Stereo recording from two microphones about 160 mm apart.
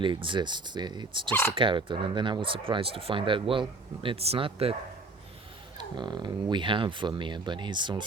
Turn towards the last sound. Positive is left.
turn(degrees=-30)  # may be behind; listen again after turning